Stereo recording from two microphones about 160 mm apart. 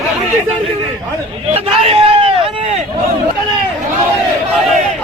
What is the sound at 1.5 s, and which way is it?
Hubbub, 40° right (ahead or behind).